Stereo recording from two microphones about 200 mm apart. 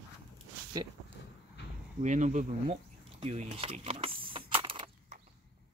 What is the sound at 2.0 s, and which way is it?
Speech, 35° right (ahead or behind).